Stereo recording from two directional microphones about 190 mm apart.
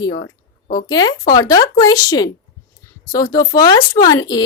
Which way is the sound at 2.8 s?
20° left (ahead or behind).